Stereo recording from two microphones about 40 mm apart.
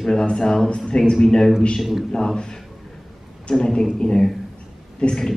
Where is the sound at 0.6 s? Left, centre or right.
Left.